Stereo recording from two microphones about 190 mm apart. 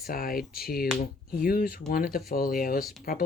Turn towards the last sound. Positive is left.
turn(degrees=50)  # may be behind; listen again after turning